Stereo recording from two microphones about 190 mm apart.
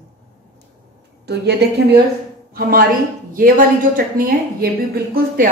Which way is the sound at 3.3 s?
45° right (ahead or behind).